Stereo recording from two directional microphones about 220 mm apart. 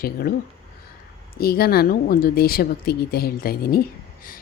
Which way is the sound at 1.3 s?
45° left (ahead or behind).